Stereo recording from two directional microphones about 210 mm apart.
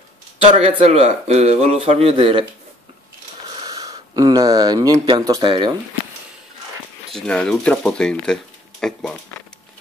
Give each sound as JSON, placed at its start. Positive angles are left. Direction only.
{"t": 0.5, "sound": "speech", "side_deg": -30}
{"t": 3.6, "sound": "speech", "side_deg": -15}
{"t": 7.1, "sound": "speech", "side_deg": 5}